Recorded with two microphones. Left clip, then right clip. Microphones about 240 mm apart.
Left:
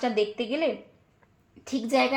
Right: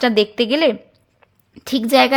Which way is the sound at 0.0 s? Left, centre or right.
Right.